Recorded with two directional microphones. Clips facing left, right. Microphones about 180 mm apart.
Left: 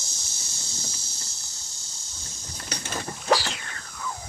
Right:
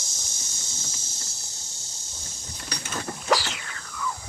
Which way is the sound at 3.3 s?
40° left (ahead or behind).